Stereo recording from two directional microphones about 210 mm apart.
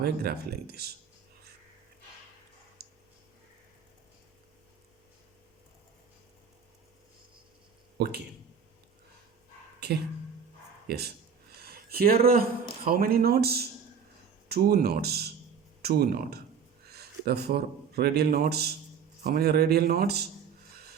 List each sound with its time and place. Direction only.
0.0 s speech: 50° right (ahead or behind)
2.8 s a sound: 50° right (ahead or behind)
8.0 s speech: 50° right (ahead or behind)
10.8 s speech: 50° right (ahead or behind)